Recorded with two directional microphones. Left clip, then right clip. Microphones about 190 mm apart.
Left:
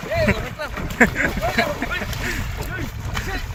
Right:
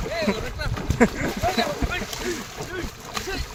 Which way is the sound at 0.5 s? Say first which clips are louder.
Left 3 dB; 35° right (ahead or behind).